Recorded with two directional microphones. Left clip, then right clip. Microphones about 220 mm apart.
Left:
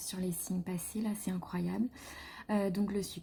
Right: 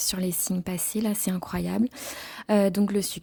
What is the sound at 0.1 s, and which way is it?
A woman's voice, 50° right (ahead or behind).